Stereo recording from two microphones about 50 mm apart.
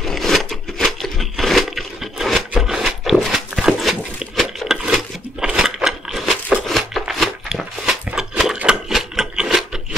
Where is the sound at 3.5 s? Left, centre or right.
Centre.